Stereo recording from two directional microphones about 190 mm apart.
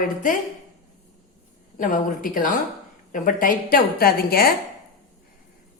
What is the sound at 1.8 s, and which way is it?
A woman's voice, 45° left (ahead or behind).